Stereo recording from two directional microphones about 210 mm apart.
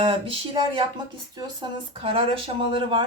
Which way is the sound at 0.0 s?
25° right (ahead or behind).